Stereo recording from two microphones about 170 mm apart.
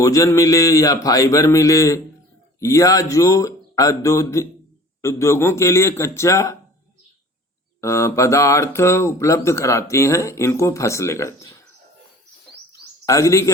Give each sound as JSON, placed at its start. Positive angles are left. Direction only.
{"t": 0.0, "sound": "a sound", "side_deg": 20}
{"t": 5.0, "sound": "speech", "side_deg": 15}
{"t": 7.8, "sound": "speech", "side_deg": 15}
{"t": 13.1, "sound": "speech", "side_deg": 20}